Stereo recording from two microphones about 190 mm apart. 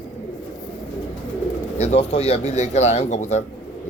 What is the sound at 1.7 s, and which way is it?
A man's voice, 35° left (ahead or behind).